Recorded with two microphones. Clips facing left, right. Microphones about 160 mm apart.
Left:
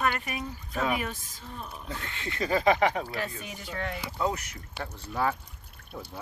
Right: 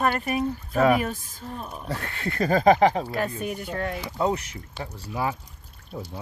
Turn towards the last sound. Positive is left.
turn(degrees=-20)  # may be behind; listen again after turning